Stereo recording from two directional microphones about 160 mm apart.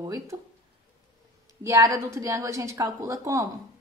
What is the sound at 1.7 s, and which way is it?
A woman's voice, 20° right (ahead or behind).